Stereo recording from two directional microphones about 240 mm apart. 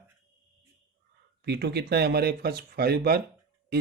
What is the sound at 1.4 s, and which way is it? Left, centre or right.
Speech, right.